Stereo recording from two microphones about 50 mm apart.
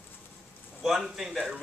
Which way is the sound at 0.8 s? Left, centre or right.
Centre.